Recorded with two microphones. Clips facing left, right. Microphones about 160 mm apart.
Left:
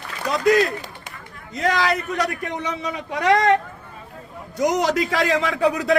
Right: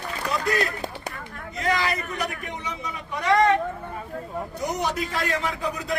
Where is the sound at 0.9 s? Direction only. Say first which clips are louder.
Right 5 dB; 90° right.